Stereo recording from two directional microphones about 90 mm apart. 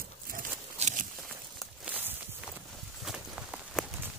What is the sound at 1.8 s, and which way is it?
Walk, 20° right (ahead or behind).